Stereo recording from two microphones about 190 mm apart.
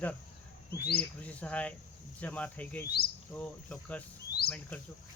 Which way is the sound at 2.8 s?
55° left (ahead or behind).